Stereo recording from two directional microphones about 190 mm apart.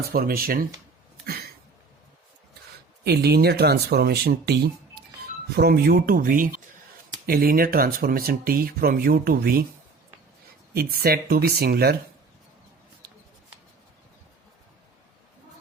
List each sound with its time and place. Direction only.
0.0 s speech: 50° right (ahead or behind)
3.0 s speech: 55° right (ahead or behind)
10.8 s speech: 55° right (ahead or behind)